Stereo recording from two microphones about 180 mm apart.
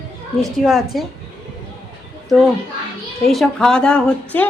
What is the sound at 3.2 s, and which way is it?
Speech, centre (ahead or behind).